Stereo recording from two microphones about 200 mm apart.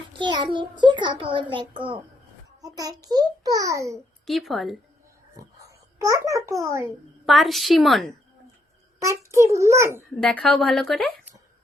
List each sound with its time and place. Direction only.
0.1 s a child's voice: 25° right (ahead or behind)
4.3 s speech: centre (ahead or behind)
5.4 s a sound: 15° right (ahead or behind)
7.3 s speech: centre (ahead or behind)
9.0 s a child's voice: 15° right (ahead or behind)
10.0 s speech: 5° left (ahead or behind)